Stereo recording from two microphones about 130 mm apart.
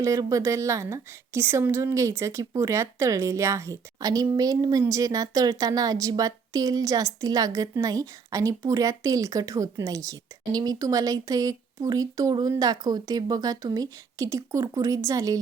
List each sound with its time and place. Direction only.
0.0 s a woman's voice: 25° right (ahead or behind)